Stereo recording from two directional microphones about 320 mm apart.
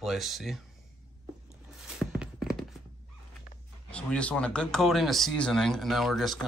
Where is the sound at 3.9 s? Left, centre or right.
Centre.